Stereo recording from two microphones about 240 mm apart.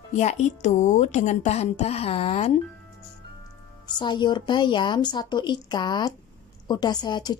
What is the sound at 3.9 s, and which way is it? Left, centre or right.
A woman's voice, centre.